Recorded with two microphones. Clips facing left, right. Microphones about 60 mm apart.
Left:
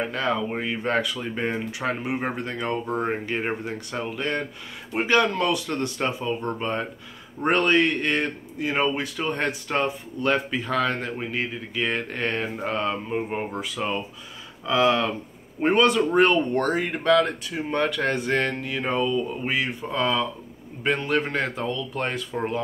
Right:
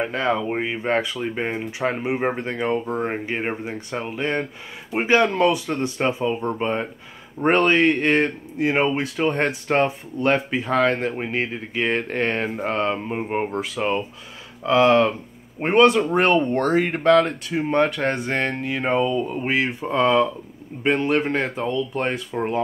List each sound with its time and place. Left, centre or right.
0.0 s speech: right
14.7 s speech: right
16.5 s speech: right; by 22.5 s centre